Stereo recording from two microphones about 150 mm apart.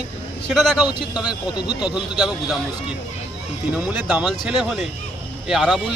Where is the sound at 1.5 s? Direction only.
30° left (ahead or behind).